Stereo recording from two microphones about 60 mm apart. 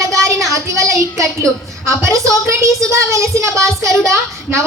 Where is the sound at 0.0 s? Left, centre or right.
Right.